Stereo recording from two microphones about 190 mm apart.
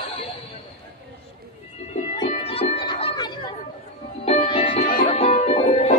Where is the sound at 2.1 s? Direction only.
25° left (ahead or behind).